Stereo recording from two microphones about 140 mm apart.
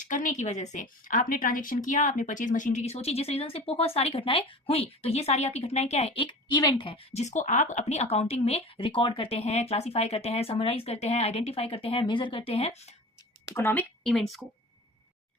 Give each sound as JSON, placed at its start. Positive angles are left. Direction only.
{"t": 0.0, "sound": "a woman's voice", "side_deg": 65}
{"t": 13.5, "sound": "speech", "side_deg": 15}
{"t": 14.0, "sound": "speech", "side_deg": 0}